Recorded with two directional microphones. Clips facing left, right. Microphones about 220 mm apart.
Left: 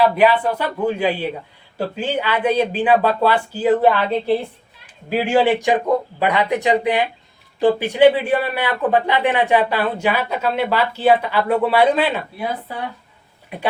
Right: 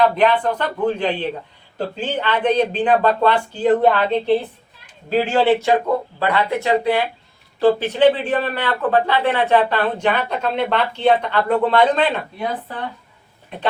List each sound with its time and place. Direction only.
0.0 s a man's voice: 5° left (ahead or behind)